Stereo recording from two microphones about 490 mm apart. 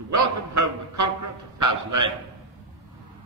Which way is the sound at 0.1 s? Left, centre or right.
Right.